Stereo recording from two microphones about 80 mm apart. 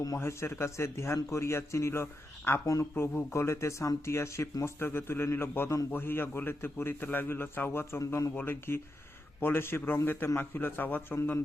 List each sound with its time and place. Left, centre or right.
0.2 s a man's voice: left